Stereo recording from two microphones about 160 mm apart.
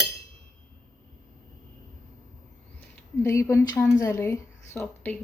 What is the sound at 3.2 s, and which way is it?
A woman's voice, 15° left (ahead or behind).